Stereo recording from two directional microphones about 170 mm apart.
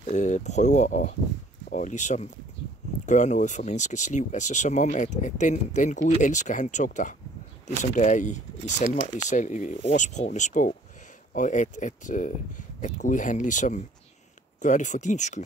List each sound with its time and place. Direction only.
0.1 s speech: 45° left (ahead or behind)